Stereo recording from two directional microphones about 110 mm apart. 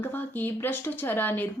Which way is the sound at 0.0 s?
15° left (ahead or behind).